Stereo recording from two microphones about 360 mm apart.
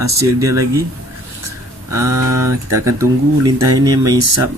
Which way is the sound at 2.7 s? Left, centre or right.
Right.